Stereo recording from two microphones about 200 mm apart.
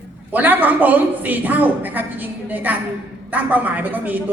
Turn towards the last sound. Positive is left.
turn(degrees=-10)  # may be behind; listen again after turning